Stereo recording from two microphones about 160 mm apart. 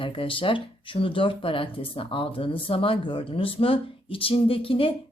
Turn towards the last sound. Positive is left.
turn(degrees=35)  # may be behind; listen again after turning